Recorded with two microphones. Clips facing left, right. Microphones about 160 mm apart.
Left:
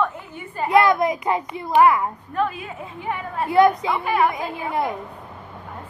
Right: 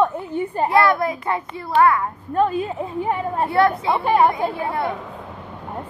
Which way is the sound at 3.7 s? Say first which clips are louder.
Right 4 dB; 30° right (ahead or behind).